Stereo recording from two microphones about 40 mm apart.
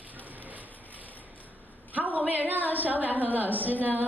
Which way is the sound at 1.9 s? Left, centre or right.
Right.